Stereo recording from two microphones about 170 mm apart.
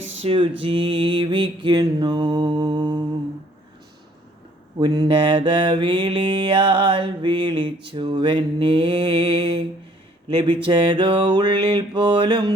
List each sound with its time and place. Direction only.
0.2 s a sound: 30° right (ahead or behind)
0.6 s mantra: 30° right (ahead or behind)
4.8 s mantra: 25° right (ahead or behind)